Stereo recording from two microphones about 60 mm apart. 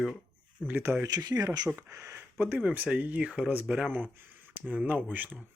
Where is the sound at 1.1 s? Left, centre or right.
Right.